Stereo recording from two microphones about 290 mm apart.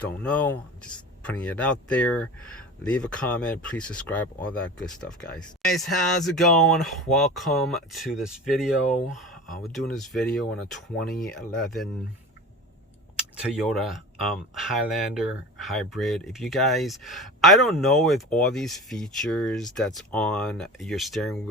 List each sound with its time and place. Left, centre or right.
0.0 s speech: centre
13.1 s speech: centre